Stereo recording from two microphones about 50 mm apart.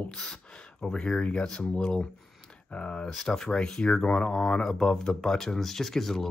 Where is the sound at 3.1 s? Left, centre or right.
Centre.